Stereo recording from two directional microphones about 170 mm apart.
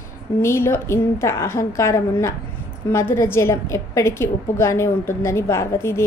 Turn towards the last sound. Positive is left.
turn(degrees=15)  # may be behind; listen again after turning